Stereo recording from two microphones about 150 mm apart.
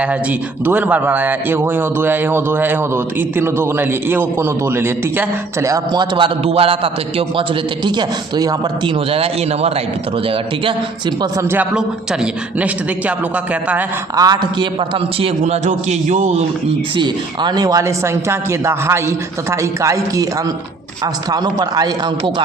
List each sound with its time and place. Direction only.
0.0 s a man's voice: 10° right (ahead or behind); by 7.4 s 40° right (ahead or behind)
7.9 s speech: 25° right (ahead or behind)
9.0 s a man's voice: 40° right (ahead or behind)
11.2 s a man's voice: 15° right (ahead or behind)
14.2 s a man's voice: 30° right (ahead or behind); by 16.4 s 45° right (ahead or behind)
17.0 s speech: 30° right (ahead or behind)